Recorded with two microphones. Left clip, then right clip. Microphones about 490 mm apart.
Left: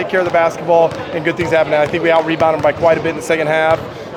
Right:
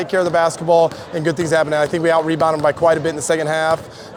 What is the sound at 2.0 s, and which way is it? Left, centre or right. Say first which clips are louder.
Speech: left 3 dB; right.